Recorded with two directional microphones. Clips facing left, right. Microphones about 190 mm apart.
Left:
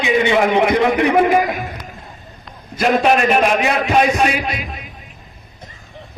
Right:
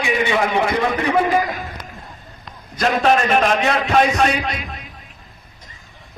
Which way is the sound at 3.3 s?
10° left (ahead or behind).